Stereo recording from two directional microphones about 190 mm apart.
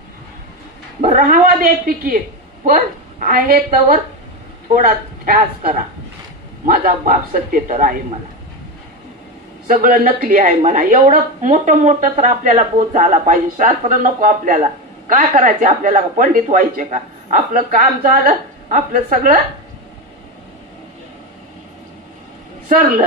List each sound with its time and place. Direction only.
1.0 s a woman's voice: 45° right (ahead or behind)
9.7 s a woman's voice: 45° right (ahead or behind)
22.7 s a woman's voice: 45° right (ahead or behind)